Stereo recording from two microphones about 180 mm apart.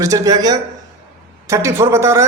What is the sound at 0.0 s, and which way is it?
A man's voice, 20° right (ahead or behind).